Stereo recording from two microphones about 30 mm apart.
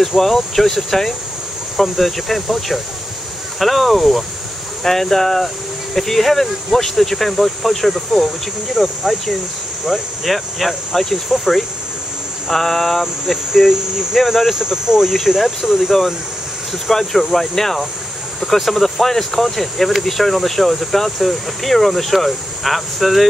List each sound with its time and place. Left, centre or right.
0.2 s speech: centre
4.8 s speech: centre
12.4 s speech: centre
13.3 s speech: centre
14.5 s speech: centre
15.1 s speech: centre
16.9 s speech: centre